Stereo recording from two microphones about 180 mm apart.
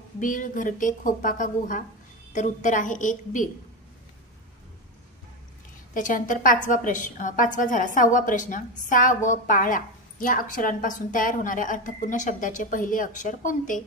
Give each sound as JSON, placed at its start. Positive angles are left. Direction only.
{"t": 0.2, "sound": "a woman's voice", "side_deg": 45}
{"t": 5.9, "sound": "a woman's voice", "side_deg": 45}